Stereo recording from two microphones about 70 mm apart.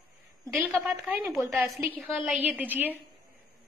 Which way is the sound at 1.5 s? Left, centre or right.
Right.